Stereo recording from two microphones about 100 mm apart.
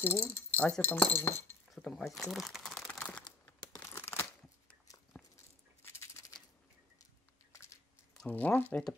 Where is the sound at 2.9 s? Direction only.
10° left (ahead or behind).